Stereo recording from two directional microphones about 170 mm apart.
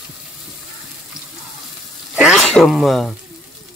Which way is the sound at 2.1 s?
5° right (ahead or behind).